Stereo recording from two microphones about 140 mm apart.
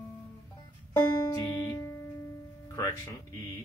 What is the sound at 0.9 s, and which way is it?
Music, 25° left (ahead or behind).